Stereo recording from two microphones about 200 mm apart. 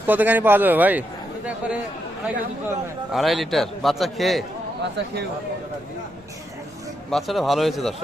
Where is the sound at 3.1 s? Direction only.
Centre (ahead or behind).